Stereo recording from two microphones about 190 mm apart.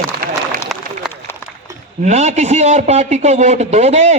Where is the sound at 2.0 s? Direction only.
35° right (ahead or behind).